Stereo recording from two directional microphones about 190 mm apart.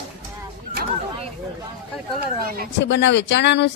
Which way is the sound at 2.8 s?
70° left (ahead or behind).